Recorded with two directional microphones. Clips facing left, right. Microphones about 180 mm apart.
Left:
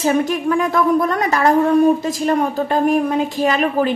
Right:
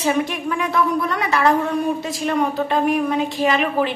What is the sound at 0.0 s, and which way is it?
A woman's voice, 45° left (ahead or behind).